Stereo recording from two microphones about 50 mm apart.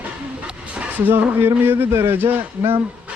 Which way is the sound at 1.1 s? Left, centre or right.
Right.